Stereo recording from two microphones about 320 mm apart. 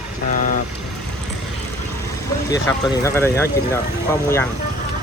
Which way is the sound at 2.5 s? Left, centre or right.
Centre.